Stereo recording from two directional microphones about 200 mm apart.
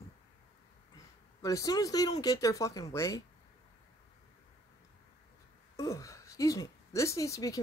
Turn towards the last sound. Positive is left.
turn(degrees=15)  # may be behind; listen again after turning